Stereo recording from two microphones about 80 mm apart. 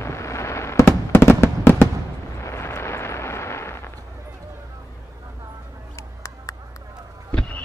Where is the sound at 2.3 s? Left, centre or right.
Left.